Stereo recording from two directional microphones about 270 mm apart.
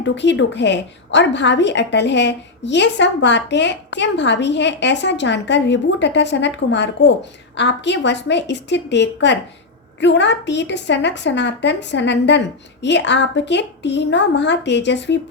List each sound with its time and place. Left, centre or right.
0.0 s a woman's voice: left